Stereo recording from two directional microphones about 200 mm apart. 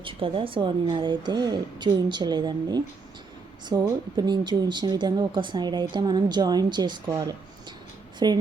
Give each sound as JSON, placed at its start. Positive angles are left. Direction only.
{"t": 0.0, "sound": "speech", "side_deg": -25}
{"t": 4.2, "sound": "speech", "side_deg": -20}